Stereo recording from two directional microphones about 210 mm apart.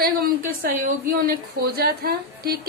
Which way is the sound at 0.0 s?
45° right (ahead or behind).